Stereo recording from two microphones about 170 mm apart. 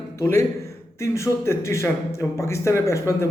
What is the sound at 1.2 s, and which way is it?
Speech, 15° left (ahead or behind).